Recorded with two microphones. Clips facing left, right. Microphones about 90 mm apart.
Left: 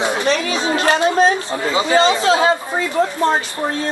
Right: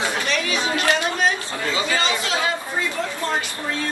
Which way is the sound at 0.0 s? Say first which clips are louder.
Left 6 dB; 25° left (ahead or behind).